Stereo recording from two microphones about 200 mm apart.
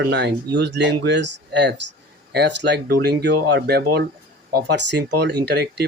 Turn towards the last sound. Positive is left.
turn(degrees=-55)  # may be behind; listen again after turning